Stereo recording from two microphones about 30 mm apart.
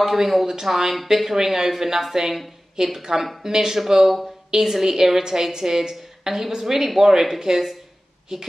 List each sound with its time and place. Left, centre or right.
0.0 s a woman's voice: centre